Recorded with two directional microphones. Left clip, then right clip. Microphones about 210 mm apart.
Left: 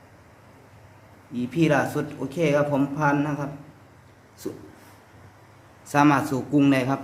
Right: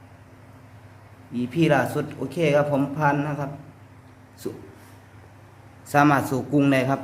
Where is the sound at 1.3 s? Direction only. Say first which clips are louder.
Right 1 dB; 5° right (ahead or behind).